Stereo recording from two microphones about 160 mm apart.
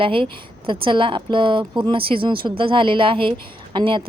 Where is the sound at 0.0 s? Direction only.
35° right (ahead or behind).